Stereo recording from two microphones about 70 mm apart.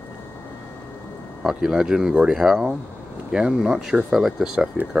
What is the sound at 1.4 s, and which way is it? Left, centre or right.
Speech, centre.